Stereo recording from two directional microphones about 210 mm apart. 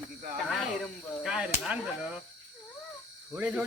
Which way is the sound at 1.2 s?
5° right (ahead or behind).